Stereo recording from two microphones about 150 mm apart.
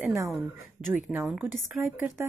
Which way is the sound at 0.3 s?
5° right (ahead or behind).